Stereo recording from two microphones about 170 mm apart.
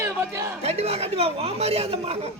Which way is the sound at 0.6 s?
35° right (ahead or behind).